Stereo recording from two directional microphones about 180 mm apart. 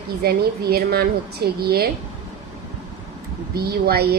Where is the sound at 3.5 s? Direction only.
60° right (ahead or behind).